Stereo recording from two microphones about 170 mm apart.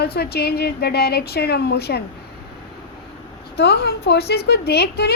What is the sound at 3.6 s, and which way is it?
A woman's voice, 70° left (ahead or behind).